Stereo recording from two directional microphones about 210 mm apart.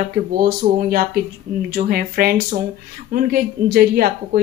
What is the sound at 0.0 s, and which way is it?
A woman's voice, 45° right (ahead or behind).